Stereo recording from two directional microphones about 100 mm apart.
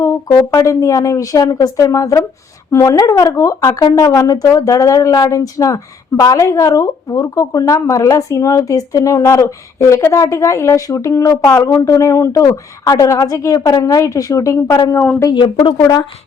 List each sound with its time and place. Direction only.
0.0 s speech: 30° left (ahead or behind)